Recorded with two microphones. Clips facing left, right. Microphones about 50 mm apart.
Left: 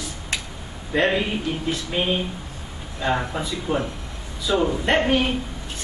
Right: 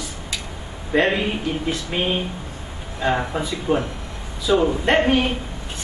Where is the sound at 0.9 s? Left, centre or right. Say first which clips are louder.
Right 2 dB; centre.